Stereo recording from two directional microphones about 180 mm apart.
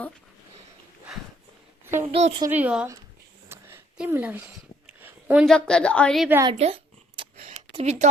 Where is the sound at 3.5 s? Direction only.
15° right (ahead or behind).